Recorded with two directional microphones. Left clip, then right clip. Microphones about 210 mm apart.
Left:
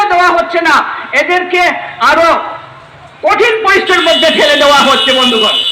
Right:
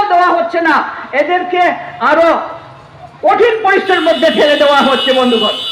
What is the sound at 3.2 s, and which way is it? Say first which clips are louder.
Speech: left 1 dB; 55° right (ahead or behind).